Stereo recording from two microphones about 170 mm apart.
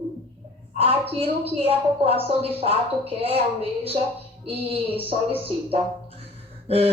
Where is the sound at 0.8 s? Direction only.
35° right (ahead or behind).